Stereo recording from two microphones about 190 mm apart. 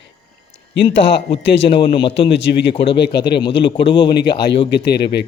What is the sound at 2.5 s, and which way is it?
Speech, 60° left (ahead or behind).